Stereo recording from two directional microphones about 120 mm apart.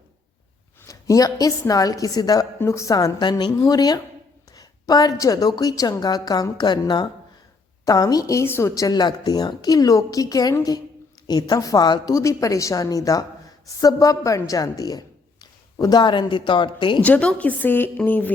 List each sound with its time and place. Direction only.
0.9 s a woman's voice: 30° left (ahead or behind)
17.0 s a woman's voice: 10° left (ahead or behind)